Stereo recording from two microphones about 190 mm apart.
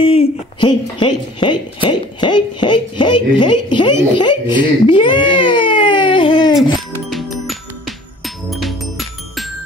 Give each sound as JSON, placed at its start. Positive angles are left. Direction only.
{"t": 0.0, "sound": "speech", "side_deg": 25}
{"t": 7.1, "sound": "music", "side_deg": 0}